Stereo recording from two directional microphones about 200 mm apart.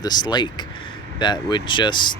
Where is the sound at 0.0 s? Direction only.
20° left (ahead or behind).